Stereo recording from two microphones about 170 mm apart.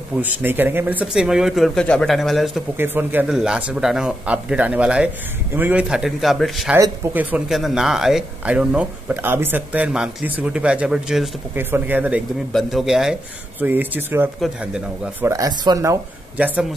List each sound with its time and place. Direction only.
0.2 s speech: 10° right (ahead or behind)
2.8 s speech: 10° right (ahead or behind)
16.3 s speech: 10° right (ahead or behind)